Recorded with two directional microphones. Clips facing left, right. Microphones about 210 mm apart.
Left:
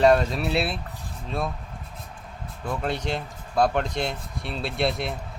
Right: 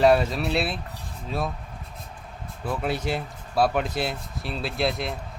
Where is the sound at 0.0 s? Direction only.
5° right (ahead or behind).